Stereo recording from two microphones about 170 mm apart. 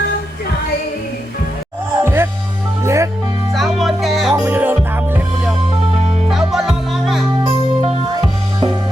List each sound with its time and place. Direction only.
2.0 s music: 15° right (ahead or behind)
3.5 s music: centre (ahead or behind)
4.4 s music: 10° right (ahead or behind)
7.8 s music: 30° right (ahead or behind)